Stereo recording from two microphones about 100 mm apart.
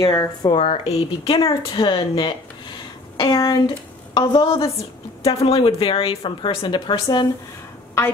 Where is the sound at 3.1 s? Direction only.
45° left (ahead or behind).